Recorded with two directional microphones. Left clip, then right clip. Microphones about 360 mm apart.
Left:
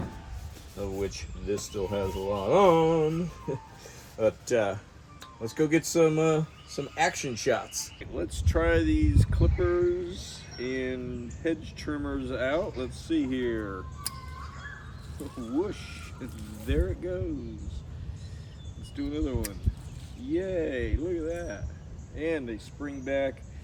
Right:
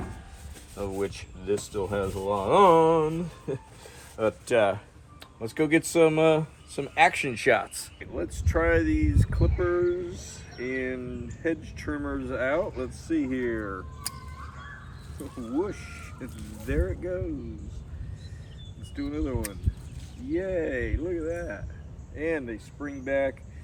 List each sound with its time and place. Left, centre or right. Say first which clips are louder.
0.8 s speech: right 2 dB; centre
1.5 s speech: right 2 dB; centre
2.7 s speech: right 3 dB; centre
4.2 s speech: right 2 dB; centre
7.4 s speech: right 4 dB; centre
7.7 s speech: left 2 dB; centre
15.2 s speech: right 1 dB; centre
18.9 s speech: right 1 dB; centre